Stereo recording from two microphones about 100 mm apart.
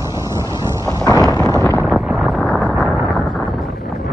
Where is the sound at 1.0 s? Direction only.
40° left (ahead or behind).